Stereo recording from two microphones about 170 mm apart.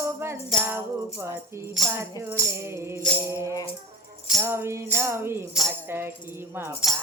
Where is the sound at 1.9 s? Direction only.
15° right (ahead or behind).